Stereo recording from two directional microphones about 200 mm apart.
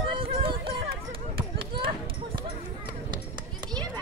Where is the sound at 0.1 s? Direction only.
25° right (ahead or behind).